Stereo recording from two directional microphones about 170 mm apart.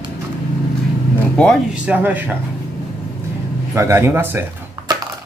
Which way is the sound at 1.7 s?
10° right (ahead or behind).